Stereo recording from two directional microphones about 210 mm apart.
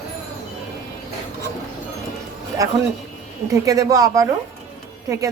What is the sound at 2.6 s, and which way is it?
Speech, 15° right (ahead or behind).